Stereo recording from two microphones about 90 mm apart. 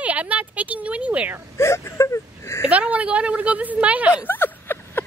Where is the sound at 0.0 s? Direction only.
15° right (ahead or behind).